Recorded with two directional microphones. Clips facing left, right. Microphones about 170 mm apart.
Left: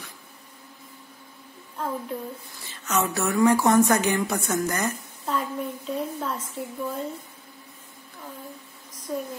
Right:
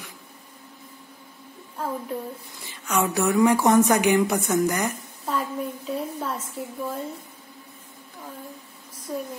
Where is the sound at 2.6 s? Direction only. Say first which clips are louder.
Right 1 dB; 15° right (ahead or behind).